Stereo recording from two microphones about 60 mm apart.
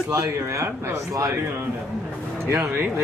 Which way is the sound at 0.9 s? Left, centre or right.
Right.